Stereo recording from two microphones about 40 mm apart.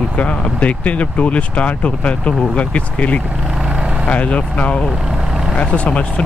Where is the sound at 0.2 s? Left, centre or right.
Left.